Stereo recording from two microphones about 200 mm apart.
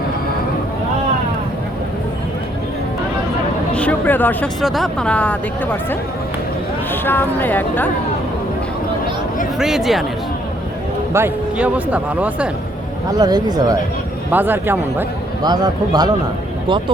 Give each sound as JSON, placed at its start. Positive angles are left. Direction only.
{"t": 3.8, "sound": "speech", "side_deg": 10}
{"t": 6.9, "sound": "speech", "side_deg": 10}
{"t": 9.6, "sound": "speech", "side_deg": 0}
{"t": 11.1, "sound": "speech", "side_deg": -10}
{"t": 13.1, "sound": "a man's voice", "side_deg": -20}
{"t": 14.3, "sound": "speech", "side_deg": -10}
{"t": 15.4, "sound": "a man's voice", "side_deg": -20}